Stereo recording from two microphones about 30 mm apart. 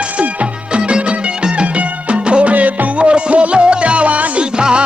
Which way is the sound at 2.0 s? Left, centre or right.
Right.